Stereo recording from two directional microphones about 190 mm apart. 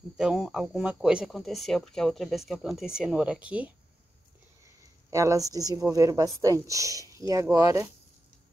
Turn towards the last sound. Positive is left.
turn(degrees=-15)  # may be behind; listen again after turning